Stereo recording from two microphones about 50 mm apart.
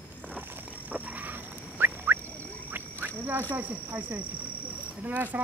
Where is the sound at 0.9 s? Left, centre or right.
Right.